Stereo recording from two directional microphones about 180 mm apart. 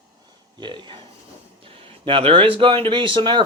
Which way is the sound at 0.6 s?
25° right (ahead or behind).